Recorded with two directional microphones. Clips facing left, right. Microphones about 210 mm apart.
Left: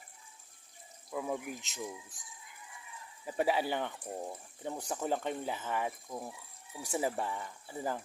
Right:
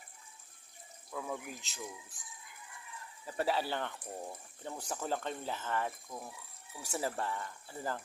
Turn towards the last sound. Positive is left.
turn(degrees=15)  # may be behind; listen again after turning